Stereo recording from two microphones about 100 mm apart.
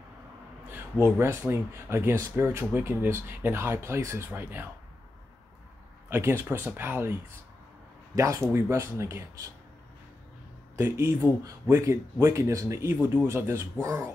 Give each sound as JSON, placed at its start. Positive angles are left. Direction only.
{"t": 0.7, "sound": "a man's voice", "side_deg": -20}
{"t": 6.0, "sound": "speech", "side_deg": -25}
{"t": 8.2, "sound": "speech", "side_deg": -30}
{"t": 10.8, "sound": "speech", "side_deg": -25}